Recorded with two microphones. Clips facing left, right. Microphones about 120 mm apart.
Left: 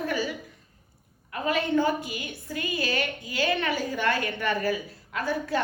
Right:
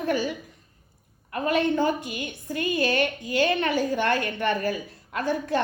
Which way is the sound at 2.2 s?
55° right (ahead or behind).